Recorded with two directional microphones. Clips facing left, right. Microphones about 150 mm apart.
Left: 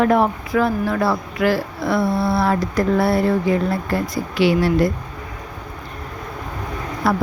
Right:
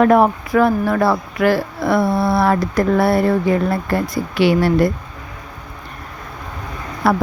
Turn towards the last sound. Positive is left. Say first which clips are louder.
# right 3 dB
turn(degrees=-60)  # may be behind; listen again after turning